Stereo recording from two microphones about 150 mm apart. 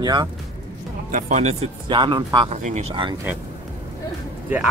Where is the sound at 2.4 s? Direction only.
50° right (ahead or behind).